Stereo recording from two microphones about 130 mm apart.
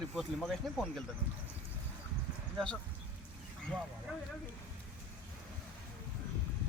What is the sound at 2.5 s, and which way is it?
Speech, 5° left (ahead or behind).